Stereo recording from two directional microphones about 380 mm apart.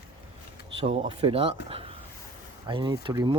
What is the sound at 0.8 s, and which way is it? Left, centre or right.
Speech, centre.